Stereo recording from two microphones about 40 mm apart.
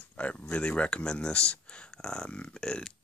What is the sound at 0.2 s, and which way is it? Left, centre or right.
Speech, left.